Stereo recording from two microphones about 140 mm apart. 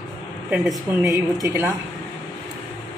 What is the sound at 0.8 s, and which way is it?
Speech, 25° right (ahead or behind).